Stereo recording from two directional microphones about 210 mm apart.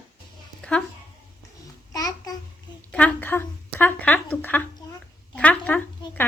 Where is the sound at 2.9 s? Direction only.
5° left (ahead or behind).